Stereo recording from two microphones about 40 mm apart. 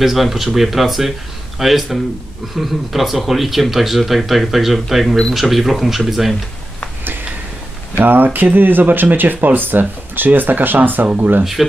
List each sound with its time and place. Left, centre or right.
0.0 s speech: centre
8.0 s speech: right